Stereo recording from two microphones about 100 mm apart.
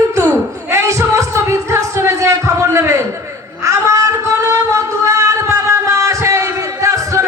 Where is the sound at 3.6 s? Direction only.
30° right (ahead or behind).